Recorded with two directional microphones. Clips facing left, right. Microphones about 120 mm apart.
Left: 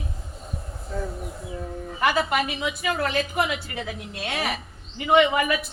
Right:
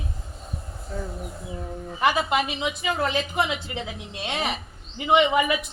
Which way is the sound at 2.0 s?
20° right (ahead or behind).